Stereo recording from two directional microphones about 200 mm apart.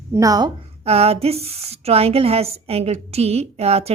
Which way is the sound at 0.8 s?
30° right (ahead or behind).